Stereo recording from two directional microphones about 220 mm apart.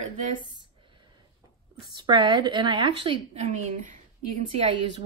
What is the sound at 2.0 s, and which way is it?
A woman's voice, 20° right (ahead or behind).